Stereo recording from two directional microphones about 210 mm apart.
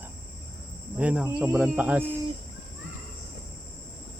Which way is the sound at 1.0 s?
5° right (ahead or behind).